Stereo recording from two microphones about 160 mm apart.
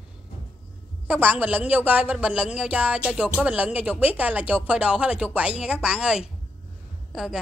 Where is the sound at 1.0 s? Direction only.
10° right (ahead or behind).